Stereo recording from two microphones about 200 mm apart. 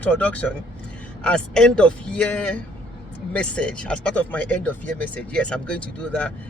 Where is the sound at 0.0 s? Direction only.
5° left (ahead or behind).